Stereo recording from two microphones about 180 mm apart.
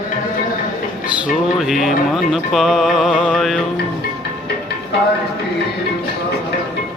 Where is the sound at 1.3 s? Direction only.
Centre (ahead or behind).